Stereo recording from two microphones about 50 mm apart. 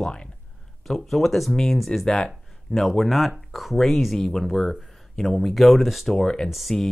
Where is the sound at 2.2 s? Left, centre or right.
Centre.